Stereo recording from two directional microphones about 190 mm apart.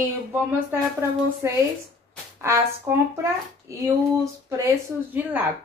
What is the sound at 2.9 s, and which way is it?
Female singing, 10° right (ahead or behind).